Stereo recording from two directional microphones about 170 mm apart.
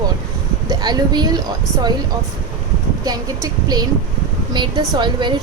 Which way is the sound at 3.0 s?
20° right (ahead or behind).